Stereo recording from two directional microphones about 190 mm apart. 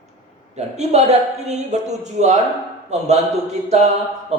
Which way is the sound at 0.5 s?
35° right (ahead or behind).